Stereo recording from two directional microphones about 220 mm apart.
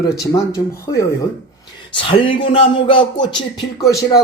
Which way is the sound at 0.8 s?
15° left (ahead or behind).